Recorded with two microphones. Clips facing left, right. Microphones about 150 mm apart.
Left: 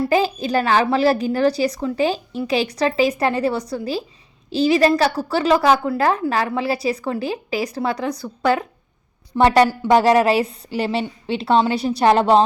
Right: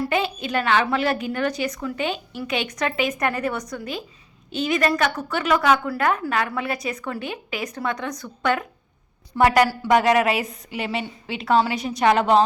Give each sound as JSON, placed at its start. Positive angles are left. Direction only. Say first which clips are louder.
{"t": 0.0, "sound": "a woman's voice", "louder": "left 5 dB", "side_deg": 35}